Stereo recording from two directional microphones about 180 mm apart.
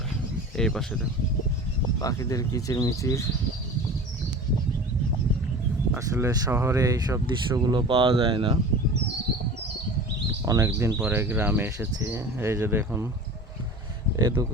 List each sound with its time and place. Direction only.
0.5 s speech: 5° left (ahead or behind)
2.0 s speech: 20° left (ahead or behind)
5.9 s speech: 15° right (ahead or behind)
10.4 s speech: 20° right (ahead or behind)
14.2 s speech: 20° right (ahead or behind)